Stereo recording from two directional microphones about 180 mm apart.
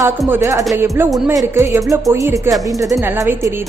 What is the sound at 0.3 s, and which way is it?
A woman's voice, 15° right (ahead or behind).